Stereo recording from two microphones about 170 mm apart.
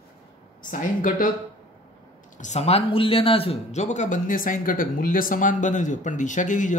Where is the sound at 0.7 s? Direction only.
50° left (ahead or behind).